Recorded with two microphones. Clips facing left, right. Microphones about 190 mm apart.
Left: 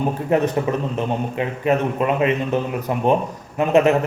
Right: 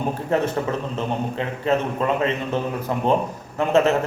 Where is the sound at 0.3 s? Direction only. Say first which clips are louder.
Left 3 dB; 15° left (ahead or behind).